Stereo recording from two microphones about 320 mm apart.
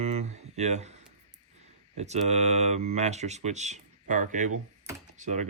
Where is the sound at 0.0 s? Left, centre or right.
Right.